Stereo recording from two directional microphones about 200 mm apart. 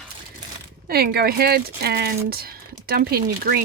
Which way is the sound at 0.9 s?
50° right (ahead or behind).